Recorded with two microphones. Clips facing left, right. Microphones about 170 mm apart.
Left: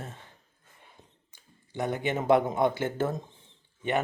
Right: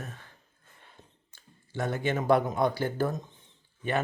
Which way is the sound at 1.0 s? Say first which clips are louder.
Right 3 dB; 15° left (ahead or behind).